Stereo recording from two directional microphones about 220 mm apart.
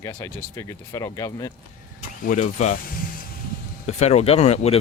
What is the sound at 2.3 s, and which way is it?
Speech, 35° left (ahead or behind).